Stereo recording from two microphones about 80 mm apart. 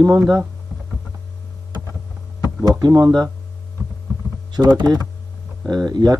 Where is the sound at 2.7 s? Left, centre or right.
Right.